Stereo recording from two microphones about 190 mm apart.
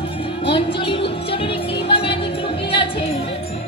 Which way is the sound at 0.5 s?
30° left (ahead or behind).